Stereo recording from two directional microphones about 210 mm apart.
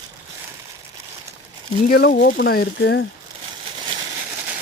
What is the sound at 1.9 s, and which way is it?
Speech, 45° left (ahead or behind).